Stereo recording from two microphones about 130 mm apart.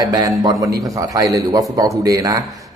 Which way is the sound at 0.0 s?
30° right (ahead or behind).